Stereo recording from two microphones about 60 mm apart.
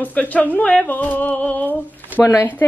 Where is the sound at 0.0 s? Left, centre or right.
Left.